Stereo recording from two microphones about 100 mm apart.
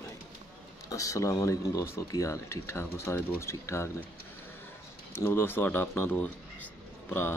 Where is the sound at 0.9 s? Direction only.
35° left (ahead or behind).